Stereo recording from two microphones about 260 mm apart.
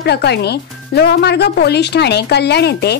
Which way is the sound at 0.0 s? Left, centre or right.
Left.